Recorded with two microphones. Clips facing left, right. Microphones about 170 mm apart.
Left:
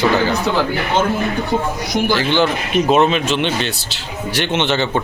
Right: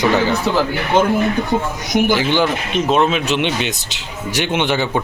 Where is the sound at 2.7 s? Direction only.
5° left (ahead or behind).